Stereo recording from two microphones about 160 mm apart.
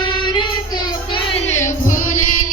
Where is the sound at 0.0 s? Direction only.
30° left (ahead or behind).